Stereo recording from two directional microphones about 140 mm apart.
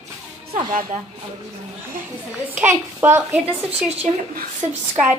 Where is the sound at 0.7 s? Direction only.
65° right (ahead or behind).